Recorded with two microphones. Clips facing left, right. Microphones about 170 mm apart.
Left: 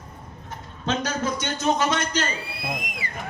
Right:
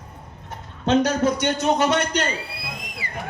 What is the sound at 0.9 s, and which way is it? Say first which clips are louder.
A man's voice: right 7 dB; 65° right (ahead or behind).